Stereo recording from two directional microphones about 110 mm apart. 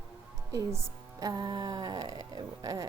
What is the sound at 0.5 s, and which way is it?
A woman's voice, 30° right (ahead or behind).